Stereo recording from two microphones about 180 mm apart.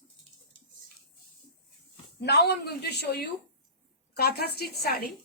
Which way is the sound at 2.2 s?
70° left (ahead or behind).